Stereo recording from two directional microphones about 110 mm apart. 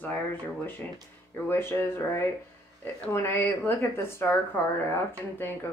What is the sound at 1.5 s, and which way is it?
A woman's voice, 20° left (ahead or behind).